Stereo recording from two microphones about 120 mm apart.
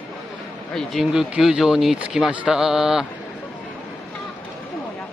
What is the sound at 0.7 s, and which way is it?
Speech, 5° left (ahead or behind).